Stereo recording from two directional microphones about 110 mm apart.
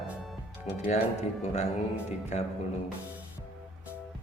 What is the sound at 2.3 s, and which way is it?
Speech, 90° left.